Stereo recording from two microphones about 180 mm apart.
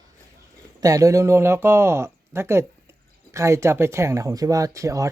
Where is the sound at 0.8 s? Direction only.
20° right (ahead or behind).